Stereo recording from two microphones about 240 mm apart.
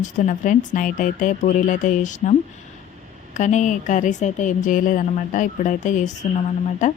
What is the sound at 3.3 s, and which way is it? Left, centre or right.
A woman's voice, left.